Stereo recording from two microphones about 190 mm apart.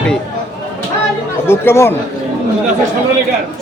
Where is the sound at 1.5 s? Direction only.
15° left (ahead or behind).